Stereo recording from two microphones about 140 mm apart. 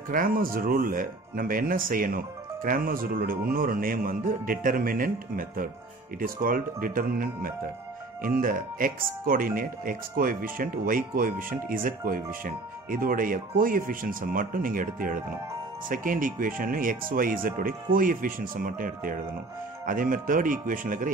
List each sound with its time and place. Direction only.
0.1 s speech: 90° right; by 21.1 s 70° right (ahead or behind)